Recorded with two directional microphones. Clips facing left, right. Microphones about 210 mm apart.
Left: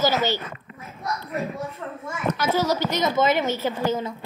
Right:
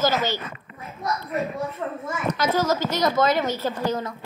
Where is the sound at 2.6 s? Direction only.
15° left (ahead or behind).